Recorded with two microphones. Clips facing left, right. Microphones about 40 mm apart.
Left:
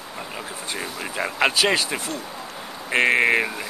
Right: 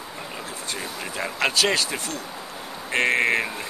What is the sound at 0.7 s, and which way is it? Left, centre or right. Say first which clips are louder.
Speech: left 2 dB; centre.